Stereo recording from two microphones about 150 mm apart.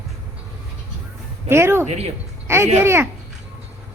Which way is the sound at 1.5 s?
15° right (ahead or behind).